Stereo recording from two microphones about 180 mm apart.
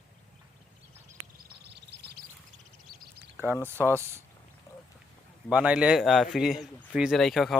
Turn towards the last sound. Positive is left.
turn(degrees=0)  # may be behind; listen again after turning